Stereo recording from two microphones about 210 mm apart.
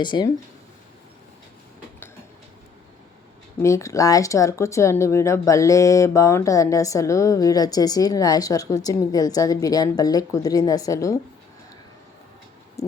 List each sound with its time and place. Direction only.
0.0 s speech: 20° left (ahead or behind)
3.6 s speech: 15° left (ahead or behind)